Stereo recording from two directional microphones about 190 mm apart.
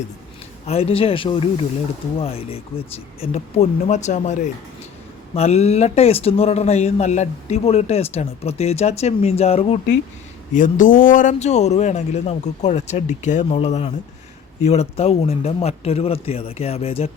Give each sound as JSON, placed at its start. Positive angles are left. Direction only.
{"t": 0.6, "sound": "speech", "side_deg": 30}
{"t": 10.5, "sound": "speech", "side_deg": 45}